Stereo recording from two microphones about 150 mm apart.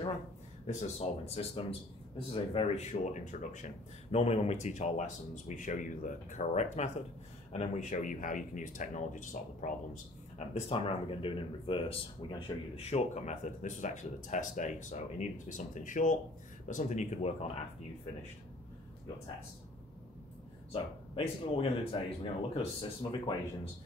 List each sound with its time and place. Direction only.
0.7 s speech: 45° left (ahead or behind)
10.5 s speech: 40° left (ahead or behind)
20.7 s speech: 40° left (ahead or behind)